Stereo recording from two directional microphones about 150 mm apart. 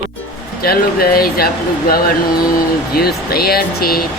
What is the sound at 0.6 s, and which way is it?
Speech, 85° left.